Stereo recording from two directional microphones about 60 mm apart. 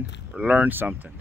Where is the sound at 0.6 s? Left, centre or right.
Right.